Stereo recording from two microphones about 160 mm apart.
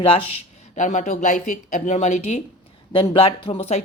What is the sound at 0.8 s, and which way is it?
Speech, 50° left (ahead or behind).